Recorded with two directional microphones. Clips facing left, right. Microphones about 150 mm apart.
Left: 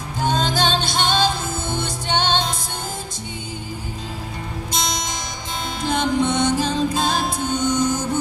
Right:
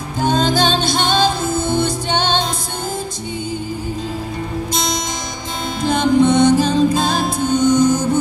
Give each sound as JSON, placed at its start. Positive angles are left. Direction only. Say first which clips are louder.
{"t": 0.2, "sound": "music", "louder": "right 5 dB", "side_deg": -40}
{"t": 5.9, "sound": "music", "louder": "right 7 dB", "side_deg": -40}